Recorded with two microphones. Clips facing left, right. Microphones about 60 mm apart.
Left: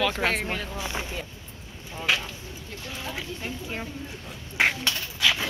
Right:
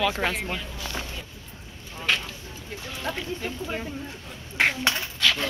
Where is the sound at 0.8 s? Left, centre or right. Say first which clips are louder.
Left 2 dB; centre.